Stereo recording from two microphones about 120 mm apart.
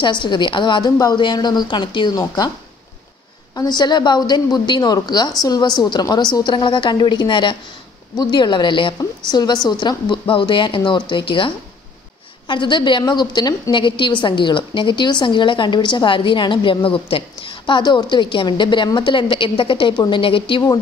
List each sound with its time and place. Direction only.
0.0 s a woman's voice: 40° left (ahead or behind)
3.5 s a woman's voice: 35° left (ahead or behind)